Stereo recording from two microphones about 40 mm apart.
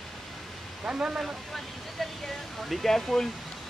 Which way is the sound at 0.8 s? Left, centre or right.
Right.